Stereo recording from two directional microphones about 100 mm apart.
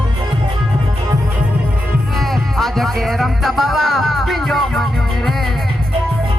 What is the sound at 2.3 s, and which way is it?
Music, 5° left (ahead or behind).